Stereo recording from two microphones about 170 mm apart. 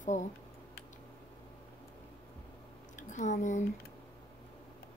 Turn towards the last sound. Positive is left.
turn(degrees=45)  # may be behind; listen again after turning